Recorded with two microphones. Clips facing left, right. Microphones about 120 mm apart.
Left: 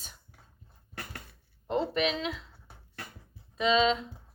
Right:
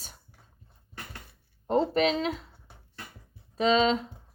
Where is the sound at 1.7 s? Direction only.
40° right (ahead or behind).